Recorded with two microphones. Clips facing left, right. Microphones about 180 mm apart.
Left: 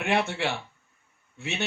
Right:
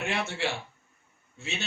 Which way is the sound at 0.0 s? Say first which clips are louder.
Left 4 dB; 60° left (ahead or behind).